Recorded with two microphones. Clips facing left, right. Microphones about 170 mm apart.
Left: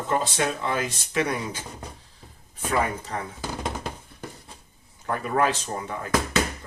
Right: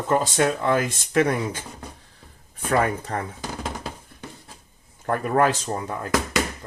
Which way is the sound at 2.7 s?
55° right (ahead or behind).